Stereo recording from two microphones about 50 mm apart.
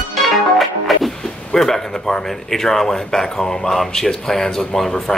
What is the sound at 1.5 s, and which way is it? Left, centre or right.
Speech, centre.